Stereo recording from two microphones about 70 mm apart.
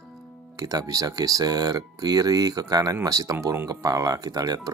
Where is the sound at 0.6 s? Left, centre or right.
Right.